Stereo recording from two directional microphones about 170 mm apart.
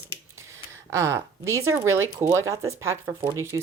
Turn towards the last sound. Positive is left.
turn(degrees=-15)  # may be behind; listen again after turning